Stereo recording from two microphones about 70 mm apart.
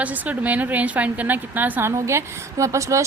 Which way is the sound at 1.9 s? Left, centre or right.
Right.